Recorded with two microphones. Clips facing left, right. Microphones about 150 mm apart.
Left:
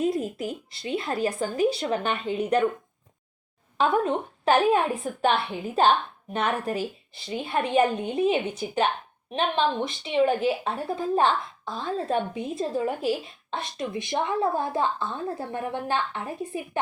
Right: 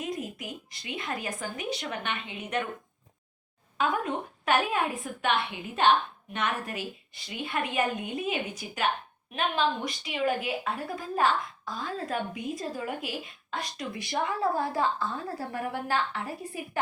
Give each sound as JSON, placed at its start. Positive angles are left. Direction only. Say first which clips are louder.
{"t": 0.0, "sound": "speech", "louder": "left 9 dB", "side_deg": 30}
{"t": 3.8, "sound": "a woman's voice", "louder": "left 6 dB", "side_deg": 30}